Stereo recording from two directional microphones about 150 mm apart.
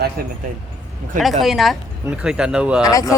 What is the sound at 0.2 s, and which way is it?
Speech, 90° right.